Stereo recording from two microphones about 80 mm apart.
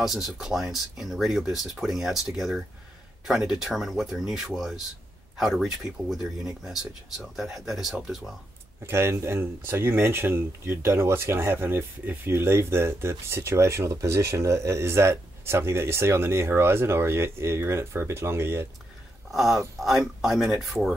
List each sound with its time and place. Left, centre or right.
0.0 s speech: centre
8.8 s speech: right
19.3 s speech: centre